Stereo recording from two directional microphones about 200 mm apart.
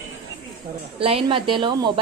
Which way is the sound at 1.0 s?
30° right (ahead or behind).